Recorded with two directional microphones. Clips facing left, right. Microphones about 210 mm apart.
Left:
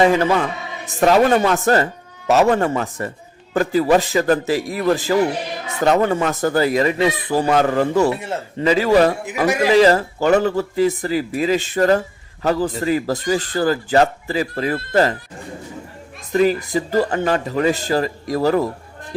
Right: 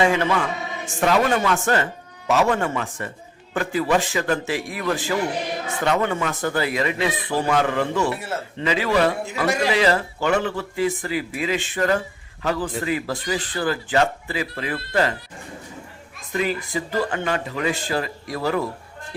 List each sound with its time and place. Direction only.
0.0 s speech: 40° left (ahead or behind)
9.2 s speech: 15° left (ahead or behind)
9.6 s speech: 40° left (ahead or behind)
16.3 s speech: 40° left (ahead or behind)